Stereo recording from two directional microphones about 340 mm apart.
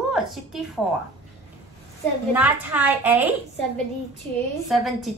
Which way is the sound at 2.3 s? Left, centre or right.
Centre.